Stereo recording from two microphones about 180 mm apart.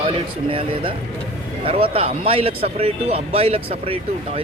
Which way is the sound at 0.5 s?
30° right (ahead or behind).